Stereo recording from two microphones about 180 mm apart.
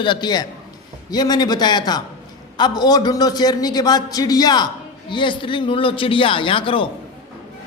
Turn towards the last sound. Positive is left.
turn(degrees=30)  # may be behind; listen again after turning